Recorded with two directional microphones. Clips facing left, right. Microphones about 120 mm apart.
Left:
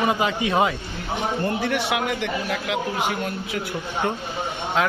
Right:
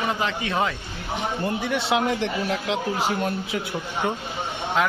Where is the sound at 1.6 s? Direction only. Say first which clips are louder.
Right 1 dB; 25° right (ahead or behind).